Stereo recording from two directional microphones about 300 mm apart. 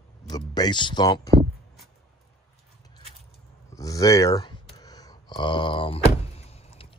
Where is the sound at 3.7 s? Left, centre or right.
Centre.